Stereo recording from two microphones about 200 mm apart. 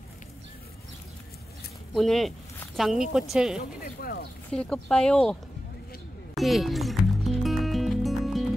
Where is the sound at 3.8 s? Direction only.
50° left (ahead or behind).